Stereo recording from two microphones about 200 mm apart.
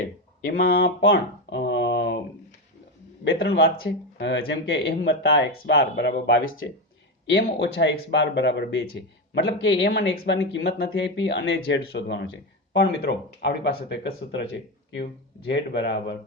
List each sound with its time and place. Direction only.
0.4 s speech: 50° left (ahead or behind)
1.0 s speech: 60° left (ahead or behind)
3.2 s speech: 55° left (ahead or behind)